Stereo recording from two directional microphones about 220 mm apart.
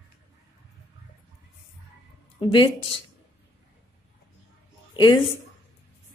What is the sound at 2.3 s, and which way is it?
Speech, 20° left (ahead or behind).